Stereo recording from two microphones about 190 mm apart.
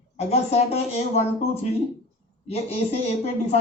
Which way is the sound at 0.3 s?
35° left (ahead or behind).